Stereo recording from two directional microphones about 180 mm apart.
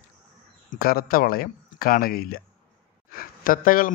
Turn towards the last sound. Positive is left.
turn(degrees=50)  # may be behind; listen again after turning